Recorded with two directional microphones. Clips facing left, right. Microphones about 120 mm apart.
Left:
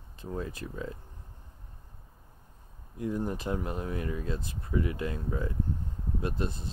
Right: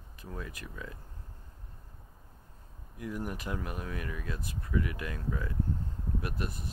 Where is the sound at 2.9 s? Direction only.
25° left (ahead or behind).